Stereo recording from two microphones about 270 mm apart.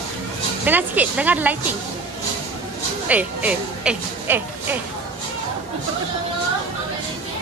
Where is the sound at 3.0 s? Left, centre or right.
Centre.